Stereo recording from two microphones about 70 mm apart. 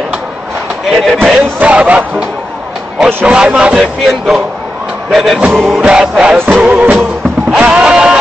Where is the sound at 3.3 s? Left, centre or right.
Centre.